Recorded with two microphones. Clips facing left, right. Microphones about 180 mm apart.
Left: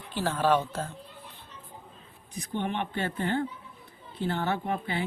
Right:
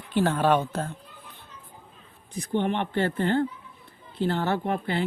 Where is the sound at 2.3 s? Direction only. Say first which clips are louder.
Right 5 dB; 65° right (ahead or behind).